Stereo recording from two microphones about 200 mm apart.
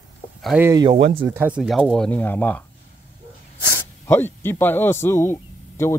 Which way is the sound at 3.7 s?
10° left (ahead or behind).